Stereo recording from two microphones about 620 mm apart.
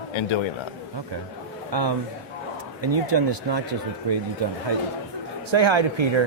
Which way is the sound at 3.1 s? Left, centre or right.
Right.